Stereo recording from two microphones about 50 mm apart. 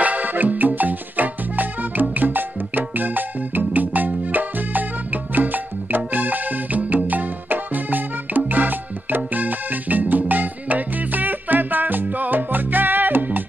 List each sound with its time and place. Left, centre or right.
0.0 s music: right